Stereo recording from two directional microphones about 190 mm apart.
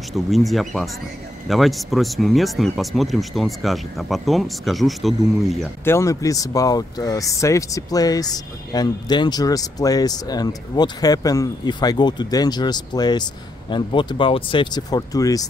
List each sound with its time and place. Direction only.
0.1 s speech: centre (ahead or behind)
5.9 s speech: 15° left (ahead or behind)